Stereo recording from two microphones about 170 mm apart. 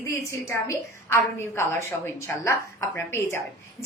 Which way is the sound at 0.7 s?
15° left (ahead or behind).